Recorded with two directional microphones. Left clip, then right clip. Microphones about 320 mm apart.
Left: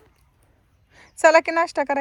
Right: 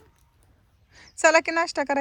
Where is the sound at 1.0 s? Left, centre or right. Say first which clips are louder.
Left 4 dB; centre.